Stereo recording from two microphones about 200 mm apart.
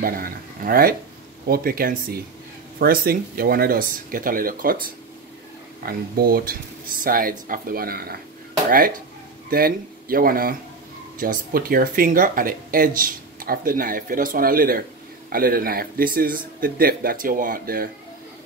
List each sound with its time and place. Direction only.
0.0 s speech: 45° right (ahead or behind)
5.9 s speech: 50° right (ahead or behind)